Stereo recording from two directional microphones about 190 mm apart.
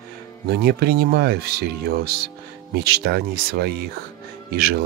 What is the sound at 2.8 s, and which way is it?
Speech, 55° right (ahead or behind).